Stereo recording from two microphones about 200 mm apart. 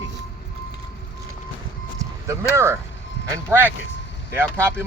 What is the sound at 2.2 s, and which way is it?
Speech, 15° right (ahead or behind).